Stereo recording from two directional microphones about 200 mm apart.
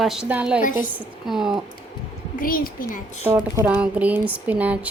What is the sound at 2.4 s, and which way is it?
Speech, 45° left (ahead or behind).